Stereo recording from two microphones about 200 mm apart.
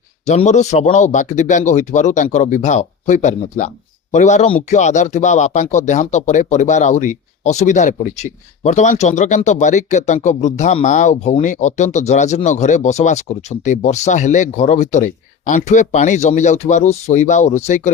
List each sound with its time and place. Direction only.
0.3 s speech: 35° left (ahead or behind)